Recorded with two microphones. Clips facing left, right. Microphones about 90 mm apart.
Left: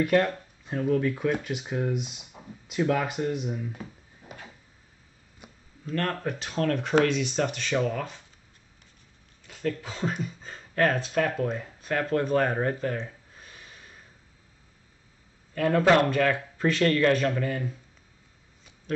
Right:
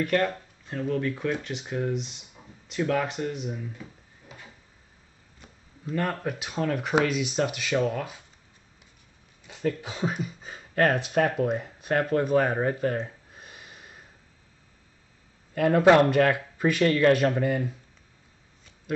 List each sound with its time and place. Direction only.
0.0 s speech: 5° left (ahead or behind)
5.4 s a sound: 15° left (ahead or behind)
5.9 s speech: 5° right (ahead or behind)
9.5 s speech: 20° right (ahead or behind)
12.2 s speech: 5° right (ahead or behind)
13.0 s a sound: 15° right (ahead or behind)
15.5 s speech: 15° right (ahead or behind)